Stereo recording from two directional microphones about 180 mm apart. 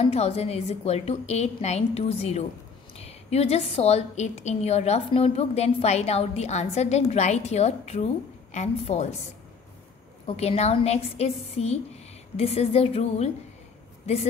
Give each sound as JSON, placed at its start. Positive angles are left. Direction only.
{"t": 0.0, "sound": "a woman's voice", "side_deg": 35}
{"t": 10.2, "sound": "a woman's voice", "side_deg": 35}